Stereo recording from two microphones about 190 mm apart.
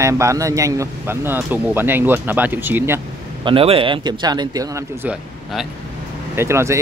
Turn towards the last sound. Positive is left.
turn(degrees=-15)  # may be behind; listen again after turning